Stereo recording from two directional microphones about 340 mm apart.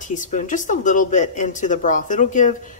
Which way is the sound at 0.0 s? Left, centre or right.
Left.